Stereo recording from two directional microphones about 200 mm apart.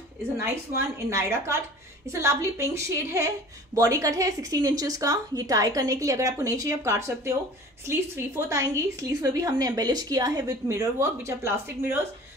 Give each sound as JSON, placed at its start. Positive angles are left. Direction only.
{"t": 0.4, "sound": "a woman's voice", "side_deg": -15}